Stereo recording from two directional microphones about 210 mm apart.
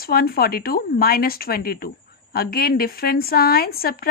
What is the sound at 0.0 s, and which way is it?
A woman's voice, 45° left (ahead or behind).